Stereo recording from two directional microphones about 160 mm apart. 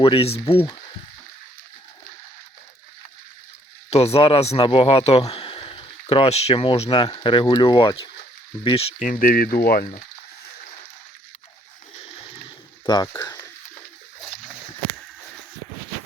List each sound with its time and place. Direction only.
0.0 s speech: 35° left (ahead or behind)
3.8 s speech: 40° left (ahead or behind)
9.0 s speech: 55° left (ahead or behind)
12.8 s speech: 25° left (ahead or behind)